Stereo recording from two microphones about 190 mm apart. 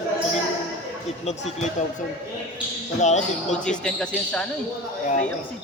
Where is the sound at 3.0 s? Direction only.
40° left (ahead or behind).